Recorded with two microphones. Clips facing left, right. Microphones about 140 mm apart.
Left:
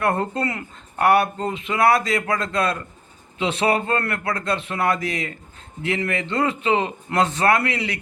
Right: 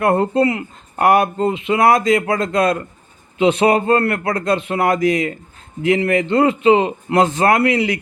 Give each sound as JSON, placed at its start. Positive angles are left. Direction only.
{"t": 0.0, "sound": "speech", "side_deg": -35}
{"t": 4.9, "sound": "speech", "side_deg": 30}
{"t": 5.9, "sound": "speech", "side_deg": -40}